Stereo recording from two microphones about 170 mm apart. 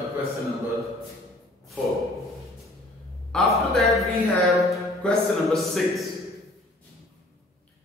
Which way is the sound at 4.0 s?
20° left (ahead or behind).